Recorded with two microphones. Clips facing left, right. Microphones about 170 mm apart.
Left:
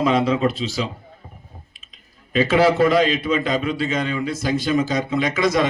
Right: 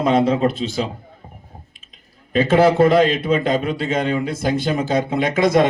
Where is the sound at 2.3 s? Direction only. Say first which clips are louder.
Right 2 dB; 50° right (ahead or behind).